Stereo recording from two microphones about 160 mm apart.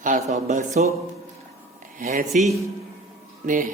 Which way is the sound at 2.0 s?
55° right (ahead or behind).